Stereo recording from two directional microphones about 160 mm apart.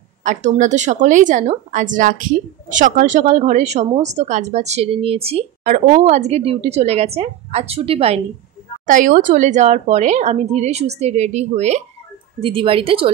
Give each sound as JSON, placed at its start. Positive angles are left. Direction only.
{"t": 0.2, "sound": "a woman's voice", "side_deg": -50}
{"t": 5.6, "sound": "a woman's voice", "side_deg": -50}
{"t": 8.8, "sound": "a woman's voice", "side_deg": -55}